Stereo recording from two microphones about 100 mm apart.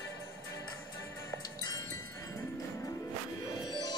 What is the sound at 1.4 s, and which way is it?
Music, 40° left (ahead or behind).